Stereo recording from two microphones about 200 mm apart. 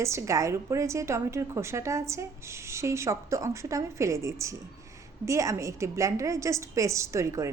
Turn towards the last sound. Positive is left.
turn(degrees=-15)  # may be behind; listen again after turning